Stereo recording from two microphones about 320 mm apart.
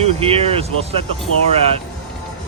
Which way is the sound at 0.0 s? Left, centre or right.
Centre.